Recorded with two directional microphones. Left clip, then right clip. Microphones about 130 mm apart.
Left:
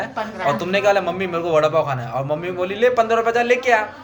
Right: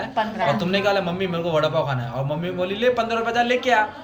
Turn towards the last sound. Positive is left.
turn(degrees=35)  # may be behind; listen again after turning